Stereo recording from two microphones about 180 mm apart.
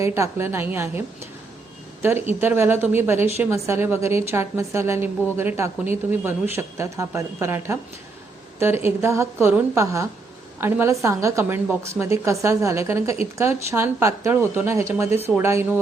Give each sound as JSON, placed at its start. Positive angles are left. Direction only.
{"t": 0.0, "sound": "a woman's voice", "side_deg": -15}